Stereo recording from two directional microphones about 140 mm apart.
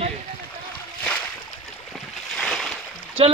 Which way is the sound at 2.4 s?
5° left (ahead or behind).